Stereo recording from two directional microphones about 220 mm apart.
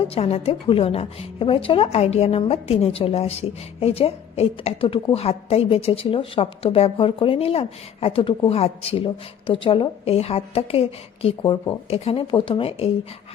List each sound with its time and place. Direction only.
0.0 s a woman's voice: 25° left (ahead or behind)